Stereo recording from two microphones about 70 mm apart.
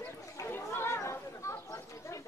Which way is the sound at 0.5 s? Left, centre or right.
Left.